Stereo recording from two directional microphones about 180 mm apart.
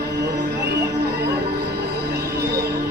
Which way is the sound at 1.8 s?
65° right (ahead or behind).